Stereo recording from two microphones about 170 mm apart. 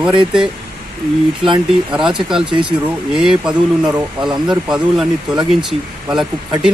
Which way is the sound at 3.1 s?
5° right (ahead or behind).